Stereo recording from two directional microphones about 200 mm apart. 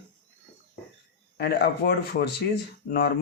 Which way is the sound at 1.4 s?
55° left (ahead or behind).